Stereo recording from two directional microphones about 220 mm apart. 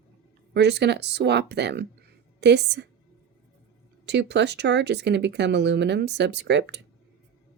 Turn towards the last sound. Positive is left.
turn(degrees=-50)  # may be behind; listen again after turning